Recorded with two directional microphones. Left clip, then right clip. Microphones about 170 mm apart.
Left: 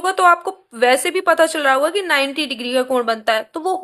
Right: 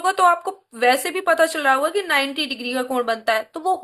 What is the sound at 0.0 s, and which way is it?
A woman's voice, 30° left (ahead or behind).